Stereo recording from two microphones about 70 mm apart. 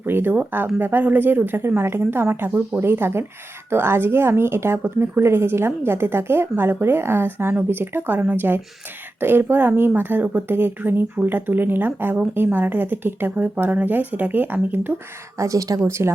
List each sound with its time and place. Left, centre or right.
0.0 s a woman's voice: right
15.4 s speech: right
15.8 s a woman's voice: right